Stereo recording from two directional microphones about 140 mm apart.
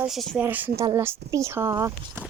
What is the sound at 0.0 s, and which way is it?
Speech, centre (ahead or behind).